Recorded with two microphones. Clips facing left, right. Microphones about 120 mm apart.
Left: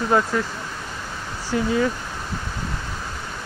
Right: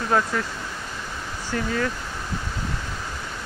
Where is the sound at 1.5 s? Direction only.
10° left (ahead or behind).